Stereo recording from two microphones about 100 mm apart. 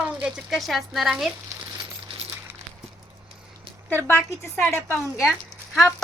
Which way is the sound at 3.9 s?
20° left (ahead or behind).